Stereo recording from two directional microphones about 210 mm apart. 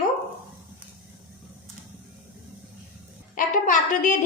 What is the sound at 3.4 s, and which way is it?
Speech, 40° left (ahead or behind).